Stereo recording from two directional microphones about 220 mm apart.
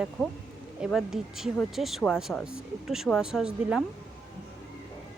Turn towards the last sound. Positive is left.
turn(degrees=-5)  # may be behind; listen again after turning